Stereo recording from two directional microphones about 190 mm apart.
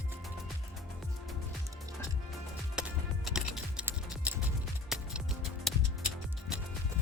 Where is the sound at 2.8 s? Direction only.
5° right (ahead or behind).